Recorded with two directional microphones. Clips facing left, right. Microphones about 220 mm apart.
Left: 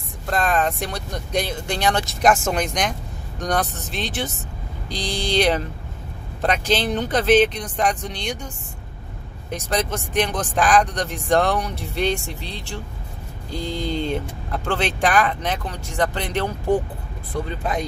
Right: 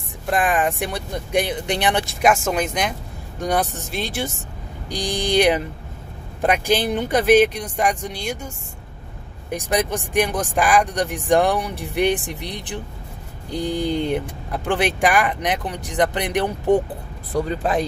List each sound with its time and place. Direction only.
0.3 s speech: 15° right (ahead or behind)
2.5 s speech: 5° right (ahead or behind)
9.5 s speech: 15° right (ahead or behind)